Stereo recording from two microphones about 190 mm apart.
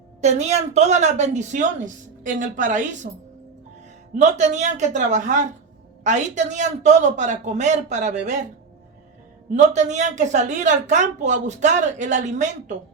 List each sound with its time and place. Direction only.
0.2 s a woman's voice: 35° right (ahead or behind)
4.2 s a woman's voice: 40° right (ahead or behind)
9.6 s a woman's voice: 40° right (ahead or behind)